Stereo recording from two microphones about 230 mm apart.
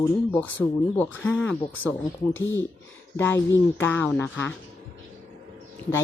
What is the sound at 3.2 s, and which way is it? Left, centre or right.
Speech, centre.